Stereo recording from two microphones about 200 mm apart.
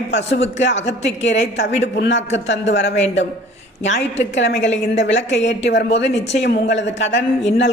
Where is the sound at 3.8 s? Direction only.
35° left (ahead or behind).